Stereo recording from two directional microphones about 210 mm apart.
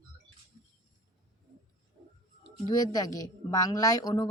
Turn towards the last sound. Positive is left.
turn(degrees=15)  # may be behind; listen again after turning